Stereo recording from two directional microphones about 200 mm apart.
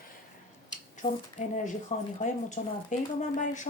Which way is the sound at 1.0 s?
25° left (ahead or behind).